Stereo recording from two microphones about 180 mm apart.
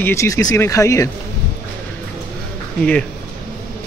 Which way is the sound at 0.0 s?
15° left (ahead or behind).